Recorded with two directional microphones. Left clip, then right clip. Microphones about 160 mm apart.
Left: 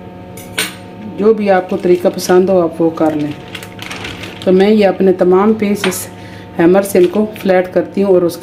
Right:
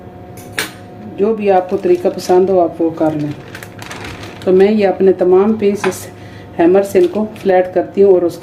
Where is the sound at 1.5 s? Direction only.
35° left (ahead or behind).